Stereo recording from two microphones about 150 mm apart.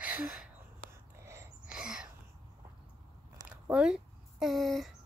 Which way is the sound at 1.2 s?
20° right (ahead or behind).